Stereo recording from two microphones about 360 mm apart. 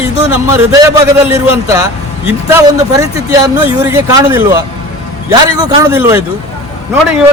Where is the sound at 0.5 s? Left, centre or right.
Centre.